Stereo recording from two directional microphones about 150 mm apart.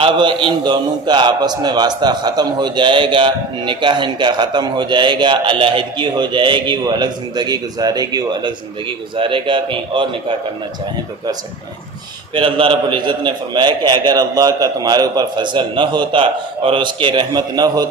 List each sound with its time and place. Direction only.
0.0 s a man's voice: 30° right (ahead or behind)
12.3 s a man's voice: 35° right (ahead or behind)